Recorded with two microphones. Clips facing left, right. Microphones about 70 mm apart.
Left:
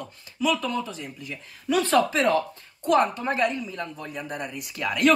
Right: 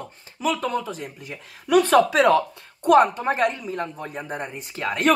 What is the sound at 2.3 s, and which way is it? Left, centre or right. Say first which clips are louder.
Speech: right 4 dB; right.